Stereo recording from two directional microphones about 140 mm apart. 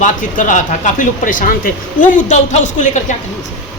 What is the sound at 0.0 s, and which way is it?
Speech, 65° left (ahead or behind).